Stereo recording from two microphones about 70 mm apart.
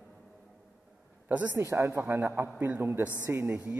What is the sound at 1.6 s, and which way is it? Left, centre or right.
Speech, right.